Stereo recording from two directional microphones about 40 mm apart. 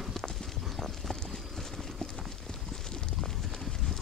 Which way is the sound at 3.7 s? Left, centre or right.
Centre.